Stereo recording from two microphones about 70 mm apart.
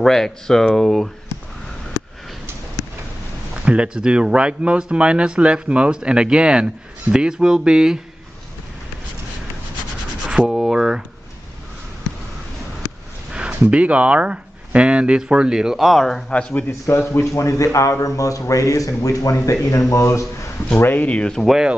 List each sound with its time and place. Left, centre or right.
0.0 s speech: centre
3.5 s speech: centre
10.3 s speech: centre
13.3 s speech: centre
17.1 s speech: left
20.8 s speech: left
21.5 s speech: centre